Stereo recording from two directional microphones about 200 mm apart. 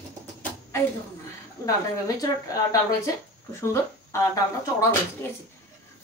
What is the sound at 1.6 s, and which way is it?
A woman's voice, 15° left (ahead or behind).